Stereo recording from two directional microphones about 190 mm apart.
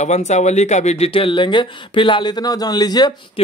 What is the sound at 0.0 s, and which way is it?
Speech, 35° left (ahead or behind).